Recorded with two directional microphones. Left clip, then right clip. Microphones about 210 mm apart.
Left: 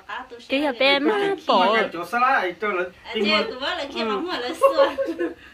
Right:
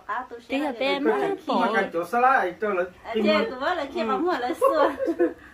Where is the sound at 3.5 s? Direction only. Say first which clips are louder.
Even; 30° right (ahead or behind).